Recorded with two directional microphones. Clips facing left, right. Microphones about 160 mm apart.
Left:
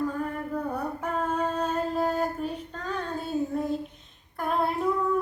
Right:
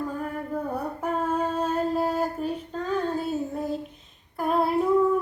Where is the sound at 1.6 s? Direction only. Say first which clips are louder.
Right 2 dB; 5° right (ahead or behind).